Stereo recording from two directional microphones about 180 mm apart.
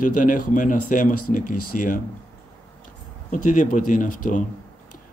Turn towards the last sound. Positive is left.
turn(degrees=45)  # may be behind; listen again after turning